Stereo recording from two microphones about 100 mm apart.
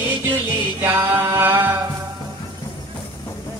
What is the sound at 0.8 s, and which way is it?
A capella, 25° right (ahead or behind).